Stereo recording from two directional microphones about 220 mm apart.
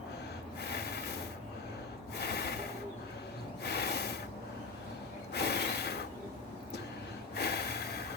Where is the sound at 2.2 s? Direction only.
50° left (ahead or behind).